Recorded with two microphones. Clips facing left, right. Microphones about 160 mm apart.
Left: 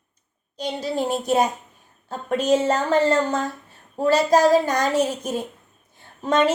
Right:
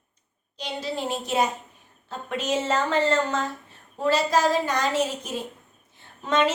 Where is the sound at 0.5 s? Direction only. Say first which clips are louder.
Left 5 dB; 45° left (ahead or behind).